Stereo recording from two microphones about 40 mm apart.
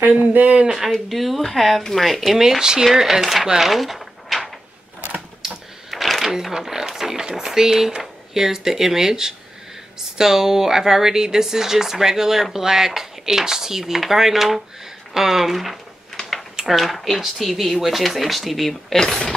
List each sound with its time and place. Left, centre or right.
0.2 s speech: right
1.0 s speech: centre
2.6 s speech: centre
3.5 s a sound: centre
6.4 s speech: centre